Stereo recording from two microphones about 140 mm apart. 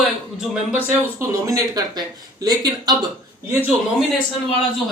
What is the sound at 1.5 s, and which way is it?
Speech, 25° right (ahead or behind).